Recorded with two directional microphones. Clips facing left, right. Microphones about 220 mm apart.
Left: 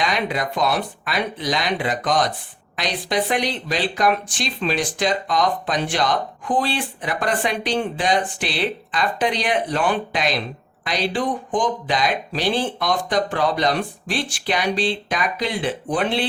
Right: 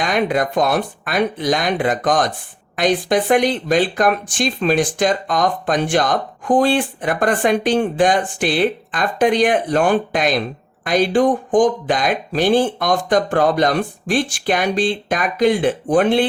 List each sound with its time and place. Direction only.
0.0 s speech: 50° right (ahead or behind)